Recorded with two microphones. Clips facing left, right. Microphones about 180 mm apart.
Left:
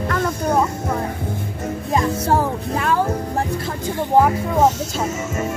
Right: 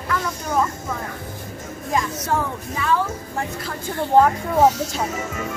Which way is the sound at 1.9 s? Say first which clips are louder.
Left 4 dB; 30° left (ahead or behind).